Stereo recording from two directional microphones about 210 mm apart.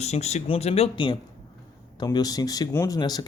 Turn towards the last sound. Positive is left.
turn(degrees=20)  # may be behind; listen again after turning